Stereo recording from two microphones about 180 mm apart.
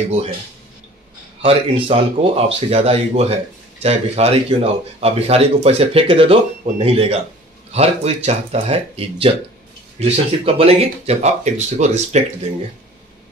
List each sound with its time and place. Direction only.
1.4 s speech: 30° right (ahead or behind)